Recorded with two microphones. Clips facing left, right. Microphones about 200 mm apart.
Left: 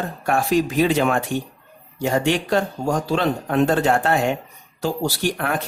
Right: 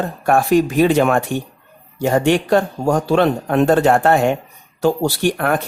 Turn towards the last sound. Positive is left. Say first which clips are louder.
# right 5 dB
turn(degrees=-55)  # may be behind; listen again after turning